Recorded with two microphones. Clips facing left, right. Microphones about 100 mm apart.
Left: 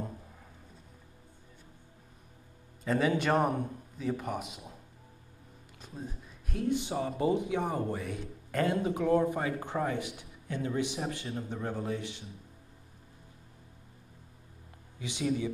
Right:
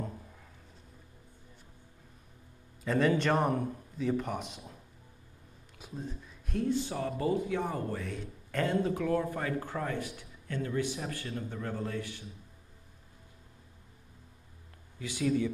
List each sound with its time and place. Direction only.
2.8 s a man's voice: centre (ahead or behind)
5.8 s a sound: 5° right (ahead or behind)
6.7 s speech: 15° left (ahead or behind)
8.9 s a man's voice: 25° left (ahead or behind)
15.0 s a man's voice: 20° left (ahead or behind)